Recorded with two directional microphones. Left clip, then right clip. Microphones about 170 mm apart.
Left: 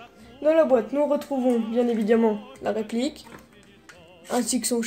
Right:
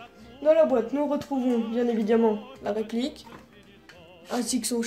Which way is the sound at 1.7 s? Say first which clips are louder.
Left 1 dB; 50° left (ahead or behind).